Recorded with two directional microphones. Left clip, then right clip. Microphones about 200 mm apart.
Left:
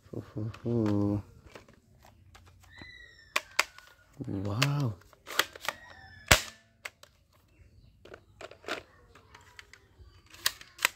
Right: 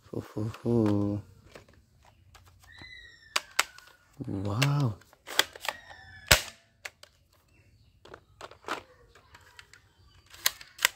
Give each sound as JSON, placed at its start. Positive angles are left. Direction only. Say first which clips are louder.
{"t": 0.1, "sound": "speech", "louder": "right 4 dB", "side_deg": -30}
{"t": 0.5, "sound": "speech", "louder": "right 4 dB", "side_deg": -20}
{"t": 2.4, "sound": "pigeon", "louder": "right 1 dB", "side_deg": -5}
{"t": 3.3, "sound": "typing", "louder": "right 1 dB", "side_deg": -5}
{"t": 8.0, "sound": "a sound", "louder": "right 1 dB", "side_deg": 0}
{"t": 10.2, "sound": "camera", "louder": "right 2 dB", "side_deg": -5}